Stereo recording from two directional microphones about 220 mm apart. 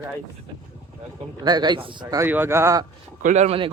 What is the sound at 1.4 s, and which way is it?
Speech, 20° right (ahead or behind).